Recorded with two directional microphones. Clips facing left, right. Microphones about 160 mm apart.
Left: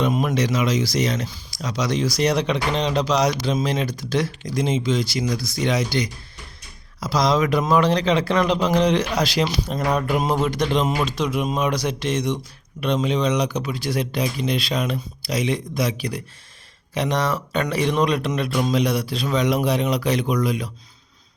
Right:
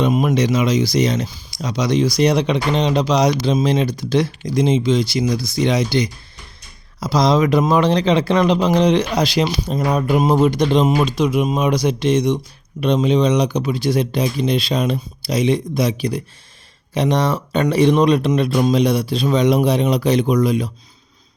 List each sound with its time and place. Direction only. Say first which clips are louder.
0.0 s speech: right 4 dB; 15° right (ahead or behind)